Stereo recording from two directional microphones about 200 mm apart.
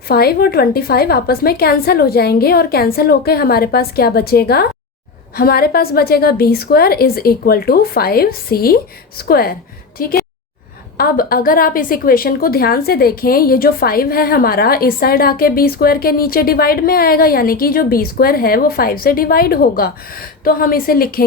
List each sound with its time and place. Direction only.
0.1 s a woman's voice: 50° left (ahead or behind)